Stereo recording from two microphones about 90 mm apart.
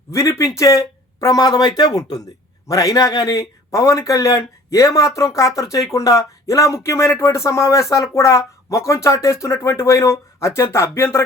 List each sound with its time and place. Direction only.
0.1 s speech: 35° left (ahead or behind)